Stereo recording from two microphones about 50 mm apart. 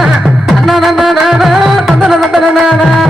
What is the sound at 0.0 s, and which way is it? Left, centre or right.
Music, centre.